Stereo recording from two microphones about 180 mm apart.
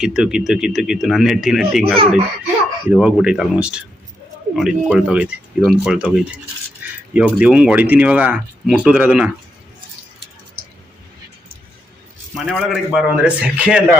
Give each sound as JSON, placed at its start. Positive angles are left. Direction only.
{"t": 0.0, "sound": "speech", "side_deg": -5}
{"t": 1.8, "sound": "speech", "side_deg": -30}
{"t": 2.9, "sound": "speech", "side_deg": -5}
{"t": 12.4, "sound": "speech", "side_deg": 0}